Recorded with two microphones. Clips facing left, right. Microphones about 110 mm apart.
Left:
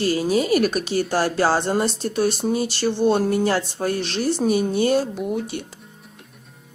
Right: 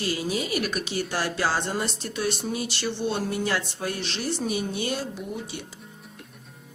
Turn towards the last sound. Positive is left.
turn(degrees=55)  # may be behind; listen again after turning